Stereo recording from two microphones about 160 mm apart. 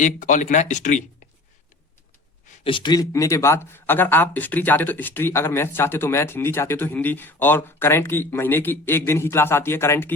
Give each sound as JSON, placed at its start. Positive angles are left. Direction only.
{"t": 0.0, "sound": "speech", "side_deg": 50}
{"t": 2.6, "sound": "speech", "side_deg": 30}